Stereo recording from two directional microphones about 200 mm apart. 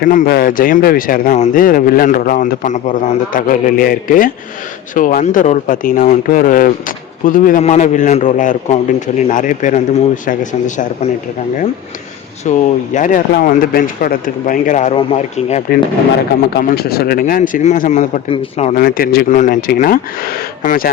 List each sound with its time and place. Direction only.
0.0 s speech: 45° left (ahead or behind)
12.5 s speech: 40° left (ahead or behind)
16.6 s speech: 50° left (ahead or behind); by 18.8 s 30° left (ahead or behind)
18.8 s speech: 45° left (ahead or behind)